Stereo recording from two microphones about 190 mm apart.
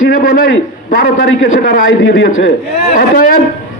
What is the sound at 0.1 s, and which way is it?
A man's voice, 55° left (ahead or behind).